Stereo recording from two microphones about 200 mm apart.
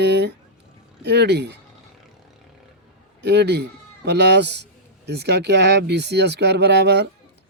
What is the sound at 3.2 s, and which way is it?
Speech, 55° right (ahead or behind).